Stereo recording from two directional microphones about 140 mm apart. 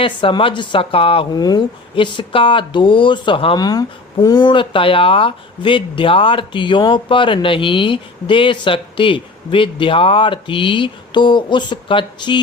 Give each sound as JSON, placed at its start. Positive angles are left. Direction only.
{"t": 0.0, "sound": "speech", "side_deg": 40}
{"t": 1.3, "sound": "speech", "side_deg": 30}